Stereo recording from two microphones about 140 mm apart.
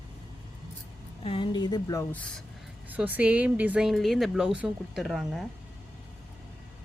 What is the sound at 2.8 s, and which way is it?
Speech, 10° right (ahead or behind).